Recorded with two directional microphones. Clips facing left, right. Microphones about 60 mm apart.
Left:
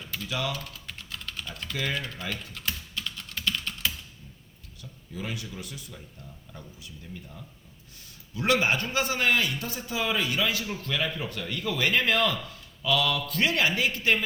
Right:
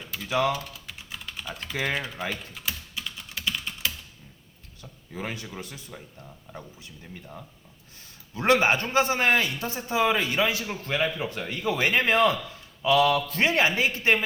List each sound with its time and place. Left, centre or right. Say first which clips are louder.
0.3 s speech: right 8 dB; right
0.5 s typing: right 4 dB; centre
1.7 s a man's voice: right 3 dB; right
2.0 s speech: right 2 dB; centre
2.3 s typing: right 1 dB; centre
4.8 s a man's voice: right 2 dB; right
7.1 s speech: right 2 dB; right
7.9 s a man's voice: right 1 dB; right